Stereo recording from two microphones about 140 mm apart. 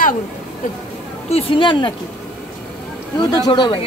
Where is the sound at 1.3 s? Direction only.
35° left (ahead or behind).